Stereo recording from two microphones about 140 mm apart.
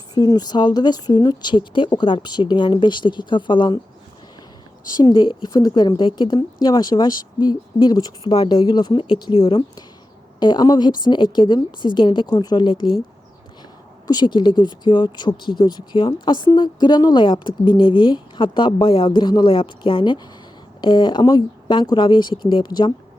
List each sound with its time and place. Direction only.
0.1 s speech: 30° left (ahead or behind)
4.9 s speech: 30° left (ahead or behind)
8.6 s speech: 30° left (ahead or behind)
14.1 s speech: 30° left (ahead or behind)